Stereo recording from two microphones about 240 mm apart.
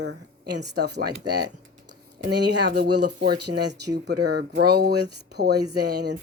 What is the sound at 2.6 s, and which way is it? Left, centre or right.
Speech, right.